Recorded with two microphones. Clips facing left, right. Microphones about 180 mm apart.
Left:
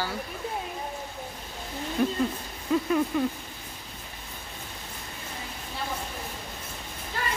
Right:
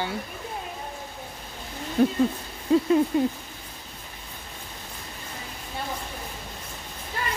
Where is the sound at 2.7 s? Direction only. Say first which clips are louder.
Right 5 dB; 30° right (ahead or behind).